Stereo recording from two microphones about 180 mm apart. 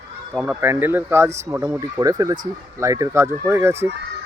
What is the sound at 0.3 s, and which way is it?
Speech, 10° right (ahead or behind).